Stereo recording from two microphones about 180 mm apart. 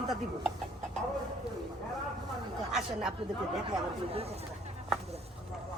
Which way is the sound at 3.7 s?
35° right (ahead or behind).